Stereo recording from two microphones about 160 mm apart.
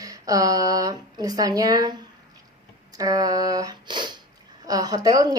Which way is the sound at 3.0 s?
20° right (ahead or behind).